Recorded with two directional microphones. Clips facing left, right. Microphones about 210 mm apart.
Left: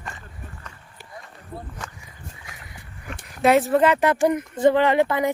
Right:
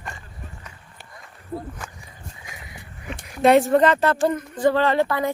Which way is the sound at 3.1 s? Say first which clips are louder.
Right 2 dB; centre (ahead or behind).